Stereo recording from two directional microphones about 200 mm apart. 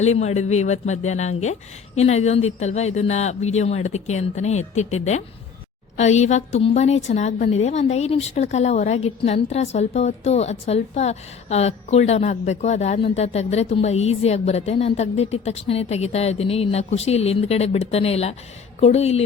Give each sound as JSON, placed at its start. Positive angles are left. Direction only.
{"t": 0.0, "sound": "a woman's voice", "side_deg": 35}